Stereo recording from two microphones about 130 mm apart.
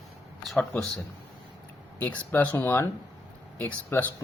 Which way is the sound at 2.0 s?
10° left (ahead or behind).